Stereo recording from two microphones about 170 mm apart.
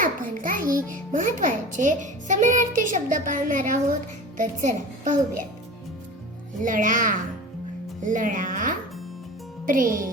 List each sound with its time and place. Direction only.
0.0 s a child's voice: 55° right (ahead or behind)
6.6 s a child's voice: 50° right (ahead or behind)